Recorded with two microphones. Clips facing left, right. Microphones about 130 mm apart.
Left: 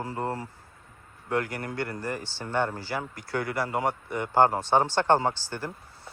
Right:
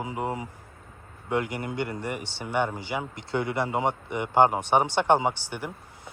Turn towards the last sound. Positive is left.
turn(degrees=-15)  # may be behind; listen again after turning